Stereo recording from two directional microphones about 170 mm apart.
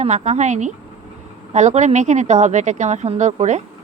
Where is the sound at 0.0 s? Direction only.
45° right (ahead or behind).